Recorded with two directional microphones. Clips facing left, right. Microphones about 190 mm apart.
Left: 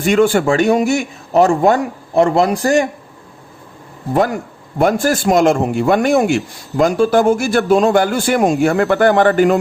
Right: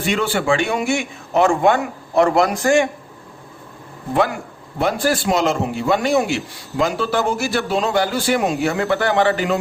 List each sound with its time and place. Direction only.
0.0 s a man's voice: 45° left (ahead or behind)
4.1 s a man's voice: 40° left (ahead or behind)